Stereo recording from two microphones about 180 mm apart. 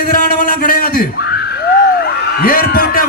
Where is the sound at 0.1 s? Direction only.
50° left (ahead or behind).